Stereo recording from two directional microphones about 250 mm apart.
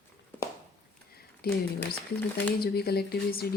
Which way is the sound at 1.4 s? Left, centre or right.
Left.